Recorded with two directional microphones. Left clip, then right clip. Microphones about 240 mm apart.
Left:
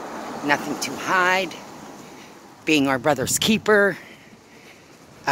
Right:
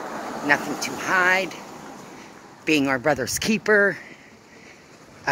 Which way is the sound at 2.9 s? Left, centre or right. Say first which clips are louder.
Left 1 dB; centre.